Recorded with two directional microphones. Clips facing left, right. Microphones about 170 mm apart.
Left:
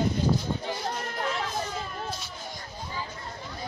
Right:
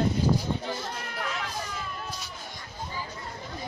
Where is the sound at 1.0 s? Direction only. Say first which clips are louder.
Left 3 dB; 35° left (ahead or behind).